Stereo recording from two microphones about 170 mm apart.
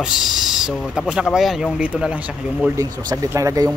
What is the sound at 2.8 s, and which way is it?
Speech, 20° right (ahead or behind).